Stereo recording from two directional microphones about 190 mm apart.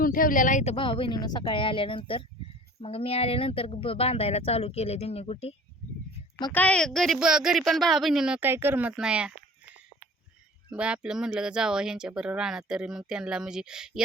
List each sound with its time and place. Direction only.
0.0 s speech: 50° left (ahead or behind); by 5.5 s 30° left (ahead or behind)
6.5 s speech: 5° left (ahead or behind)
10.7 s speech: 5° right (ahead or behind)